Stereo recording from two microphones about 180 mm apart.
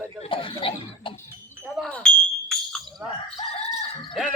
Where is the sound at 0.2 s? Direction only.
30° left (ahead or behind).